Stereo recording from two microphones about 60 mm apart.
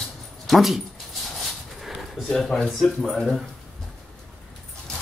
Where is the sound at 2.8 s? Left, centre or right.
Centre.